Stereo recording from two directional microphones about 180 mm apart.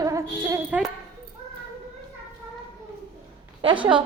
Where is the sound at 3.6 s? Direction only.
25° right (ahead or behind).